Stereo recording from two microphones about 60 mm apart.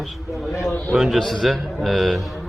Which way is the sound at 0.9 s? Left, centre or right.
Centre.